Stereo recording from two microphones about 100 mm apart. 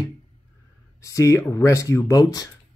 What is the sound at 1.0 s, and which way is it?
Speech, 30° left (ahead or behind).